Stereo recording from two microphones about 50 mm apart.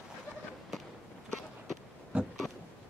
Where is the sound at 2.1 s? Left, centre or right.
Right.